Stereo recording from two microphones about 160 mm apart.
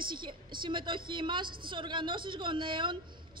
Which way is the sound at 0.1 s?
30° right (ahead or behind).